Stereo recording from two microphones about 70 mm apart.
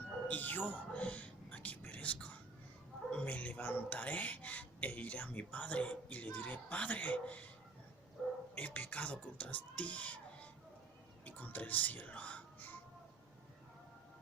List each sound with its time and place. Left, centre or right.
0.3 s whispering: left
3.1 s speech: centre
8.5 s speech: left